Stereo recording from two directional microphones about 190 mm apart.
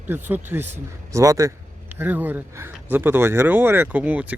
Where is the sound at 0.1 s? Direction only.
10° right (ahead or behind).